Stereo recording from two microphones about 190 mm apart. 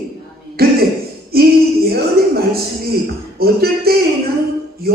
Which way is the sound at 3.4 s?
55° right (ahead or behind).